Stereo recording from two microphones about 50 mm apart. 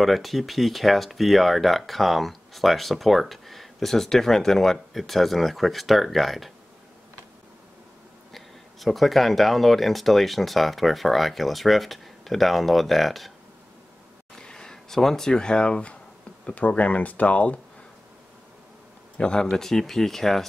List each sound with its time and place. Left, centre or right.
0.0 s speech: centre
8.3 s speech: centre
14.3 s speech: centre
19.1 s speech: centre
19.5 s speech: centre